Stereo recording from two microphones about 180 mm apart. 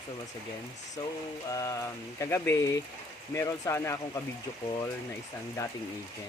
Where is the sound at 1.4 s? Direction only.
20° left (ahead or behind).